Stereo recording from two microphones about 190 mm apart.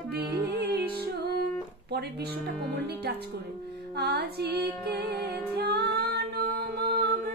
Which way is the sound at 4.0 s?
60° right (ahead or behind).